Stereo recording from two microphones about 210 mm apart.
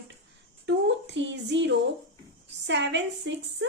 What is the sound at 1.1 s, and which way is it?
Speech, 55° right (ahead or behind).